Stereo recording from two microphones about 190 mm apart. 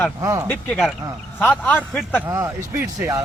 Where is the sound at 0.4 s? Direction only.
10° left (ahead or behind).